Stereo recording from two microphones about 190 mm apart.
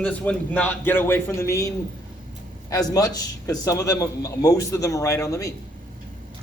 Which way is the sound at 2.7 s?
20° left (ahead or behind).